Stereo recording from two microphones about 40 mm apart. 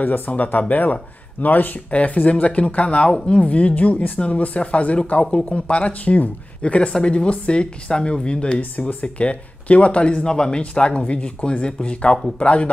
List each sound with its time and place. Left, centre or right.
0.0 s speech: left
1.9 s speech: left